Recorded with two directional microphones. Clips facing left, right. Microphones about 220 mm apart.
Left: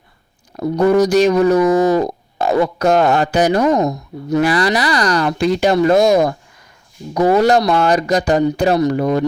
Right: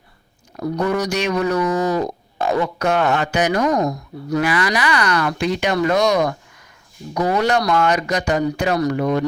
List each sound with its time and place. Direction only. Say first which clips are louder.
0.5 s speech: left 7 dB; 30° left (ahead or behind)
1.6 s speech: left 6 dB; 35° left (ahead or behind)
4.4 s speech: left 4 dB; 35° left (ahead or behind)